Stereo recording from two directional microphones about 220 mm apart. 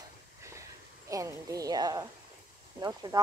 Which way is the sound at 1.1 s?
15° right (ahead or behind).